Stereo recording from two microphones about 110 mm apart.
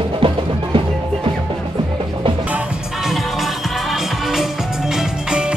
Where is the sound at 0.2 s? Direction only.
55° right (ahead or behind).